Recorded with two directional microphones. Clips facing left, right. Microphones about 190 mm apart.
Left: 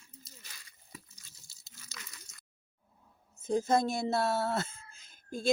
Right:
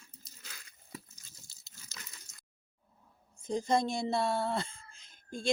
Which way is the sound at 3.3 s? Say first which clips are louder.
Left 2 dB; 5° left (ahead or behind).